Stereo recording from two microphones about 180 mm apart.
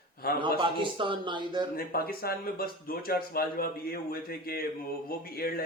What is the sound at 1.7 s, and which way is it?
Speech, 55° left (ahead or behind).